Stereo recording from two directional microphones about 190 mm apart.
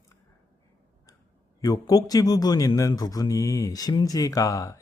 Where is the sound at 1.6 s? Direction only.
20° left (ahead or behind).